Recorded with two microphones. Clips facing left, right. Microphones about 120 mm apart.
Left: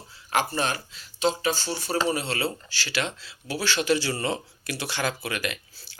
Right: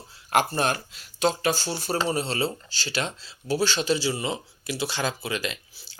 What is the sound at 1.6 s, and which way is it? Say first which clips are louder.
Speech: even; 35° right (ahead or behind).